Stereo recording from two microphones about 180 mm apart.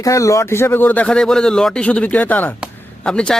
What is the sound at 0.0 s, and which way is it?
Speech, 15° left (ahead or behind).